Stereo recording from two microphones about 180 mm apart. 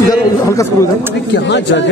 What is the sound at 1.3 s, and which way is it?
Speech, 70° left (ahead or behind).